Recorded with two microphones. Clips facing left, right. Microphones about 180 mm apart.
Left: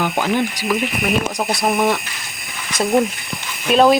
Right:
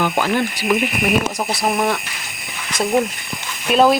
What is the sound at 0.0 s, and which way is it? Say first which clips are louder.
Ratchet: even; 15° left (ahead or behind).